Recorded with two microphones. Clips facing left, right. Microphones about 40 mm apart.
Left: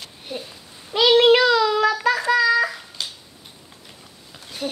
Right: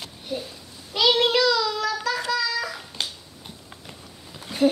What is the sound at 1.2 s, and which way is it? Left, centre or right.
Child singing, left.